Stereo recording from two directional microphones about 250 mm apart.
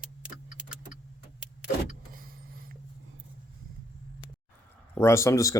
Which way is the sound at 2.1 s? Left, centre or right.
Right.